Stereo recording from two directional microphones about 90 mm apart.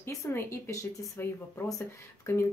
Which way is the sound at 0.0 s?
30° left (ahead or behind).